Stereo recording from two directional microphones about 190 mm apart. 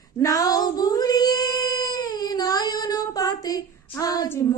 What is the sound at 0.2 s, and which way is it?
Child singing, 20° left (ahead or behind).